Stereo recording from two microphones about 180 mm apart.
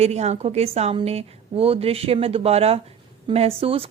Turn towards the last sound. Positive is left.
turn(degrees=-30)  # may be behind; listen again after turning